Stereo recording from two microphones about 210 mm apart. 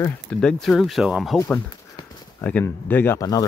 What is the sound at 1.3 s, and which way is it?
Speech, 10° left (ahead or behind).